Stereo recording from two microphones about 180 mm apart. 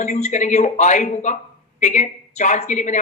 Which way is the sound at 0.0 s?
40° left (ahead or behind).